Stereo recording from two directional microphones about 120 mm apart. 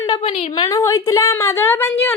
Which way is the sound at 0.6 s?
30° left (ahead or behind).